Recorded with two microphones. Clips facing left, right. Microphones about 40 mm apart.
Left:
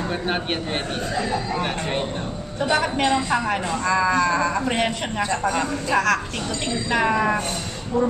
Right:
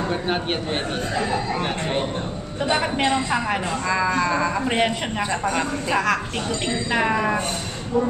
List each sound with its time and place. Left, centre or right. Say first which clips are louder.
0.1 s a man's voice: right 1 dB; centre
1.1 s a man's voice: right 1 dB; right
1.6 s a man's voice: right 1 dB; centre
2.7 s a man's voice: left 1 dB; centre